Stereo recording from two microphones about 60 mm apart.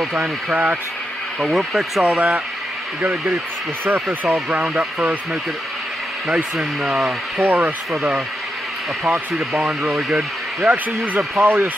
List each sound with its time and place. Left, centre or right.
0.2 s speech: right
1.4 s speech: centre
2.1 s speech: right
6.2 s speech: centre
7.3 s speech: right
9.6 s speech: centre
10.7 s speech: right